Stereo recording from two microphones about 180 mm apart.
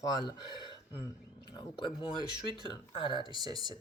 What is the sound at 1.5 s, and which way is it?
Speech, 25° left (ahead or behind).